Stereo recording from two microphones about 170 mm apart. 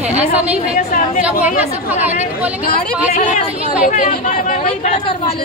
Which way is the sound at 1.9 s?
10° right (ahead or behind).